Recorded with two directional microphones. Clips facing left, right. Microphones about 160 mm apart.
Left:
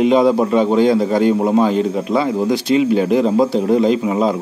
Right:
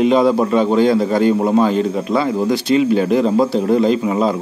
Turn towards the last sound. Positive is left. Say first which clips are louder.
# even
turn(degrees=15)  # may be behind; listen again after turning